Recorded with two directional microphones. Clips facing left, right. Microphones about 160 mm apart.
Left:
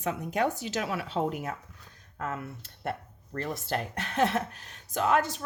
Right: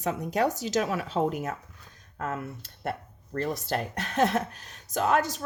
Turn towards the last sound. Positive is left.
turn(degrees=-40)  # may be behind; listen again after turning